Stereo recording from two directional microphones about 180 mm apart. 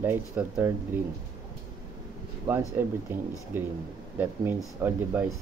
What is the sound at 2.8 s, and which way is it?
Speech, 10° right (ahead or behind).